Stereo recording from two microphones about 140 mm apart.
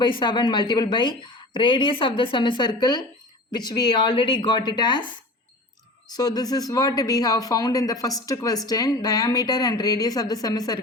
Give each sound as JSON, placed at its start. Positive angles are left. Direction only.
{"t": 0.0, "sound": "a woman's voice", "side_deg": 35}